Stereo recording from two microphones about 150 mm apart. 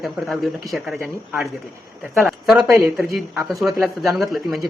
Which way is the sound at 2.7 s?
15° right (ahead or behind).